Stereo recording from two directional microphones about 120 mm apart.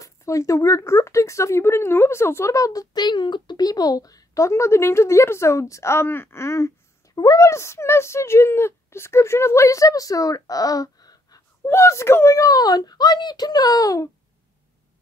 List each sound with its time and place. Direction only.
0.0 s speech: 25° left (ahead or behind)